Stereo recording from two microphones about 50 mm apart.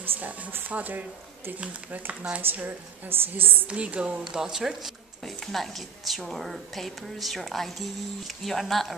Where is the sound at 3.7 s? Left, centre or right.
Right.